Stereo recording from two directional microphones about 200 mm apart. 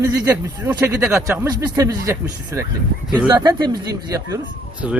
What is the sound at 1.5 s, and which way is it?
Speech, 20° right (ahead or behind).